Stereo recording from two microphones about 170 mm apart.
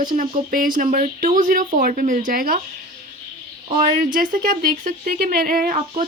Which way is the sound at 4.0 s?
55° right (ahead or behind).